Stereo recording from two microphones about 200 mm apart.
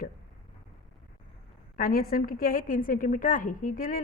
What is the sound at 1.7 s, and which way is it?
A woman's voice, 45° left (ahead or behind).